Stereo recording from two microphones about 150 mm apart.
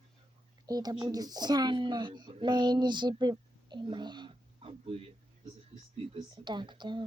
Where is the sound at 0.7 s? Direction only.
25° right (ahead or behind).